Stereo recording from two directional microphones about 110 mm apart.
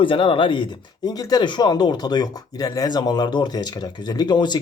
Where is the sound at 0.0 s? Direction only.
50° left (ahead or behind).